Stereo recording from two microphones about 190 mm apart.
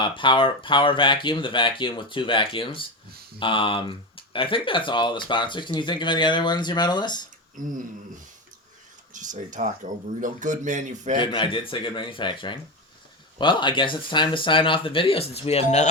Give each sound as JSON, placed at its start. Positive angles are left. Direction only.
{"t": 0.0, "sound": "speech", "side_deg": 25}
{"t": 7.5, "sound": "a sound", "side_deg": -45}
{"t": 9.1, "sound": "speech", "side_deg": -40}
{"t": 11.2, "sound": "speech", "side_deg": 25}